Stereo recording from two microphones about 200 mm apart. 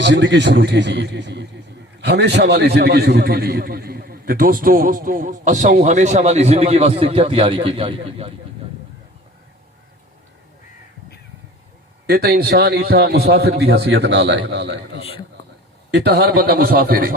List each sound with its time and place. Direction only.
0.0 s a man's voice: 60° right (ahead or behind); by 8.3 s 30° right (ahead or behind)
12.0 s a man's voice: 50° right (ahead or behind)